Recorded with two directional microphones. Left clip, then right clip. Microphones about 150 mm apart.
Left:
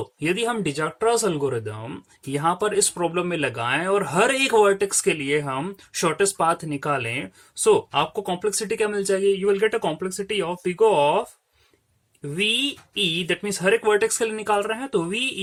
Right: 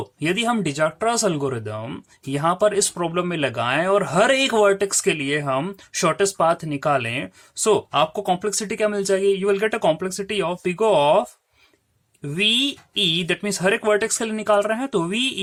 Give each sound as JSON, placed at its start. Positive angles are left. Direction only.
{"t": 0.2, "sound": "speech", "side_deg": -35}
{"t": 12.3, "sound": "speech", "side_deg": -40}